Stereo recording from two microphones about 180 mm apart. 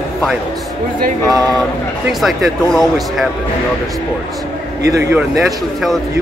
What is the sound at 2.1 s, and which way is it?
Speech, centre (ahead or behind).